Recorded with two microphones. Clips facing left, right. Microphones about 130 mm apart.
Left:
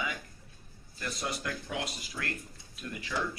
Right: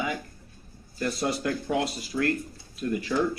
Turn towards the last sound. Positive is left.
turn(degrees=-40)  # may be behind; listen again after turning